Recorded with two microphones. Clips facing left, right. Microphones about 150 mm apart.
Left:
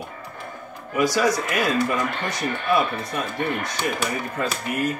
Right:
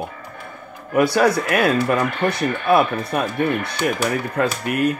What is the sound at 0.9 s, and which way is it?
Speech, 60° right (ahead or behind).